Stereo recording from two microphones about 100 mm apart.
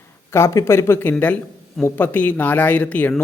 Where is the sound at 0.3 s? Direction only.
25° left (ahead or behind).